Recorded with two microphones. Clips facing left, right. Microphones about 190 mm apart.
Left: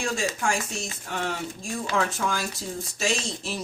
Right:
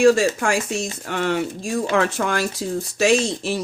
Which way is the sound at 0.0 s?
70° right (ahead or behind).